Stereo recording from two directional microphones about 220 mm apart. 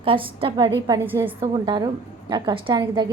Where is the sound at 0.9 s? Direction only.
10° right (ahead or behind).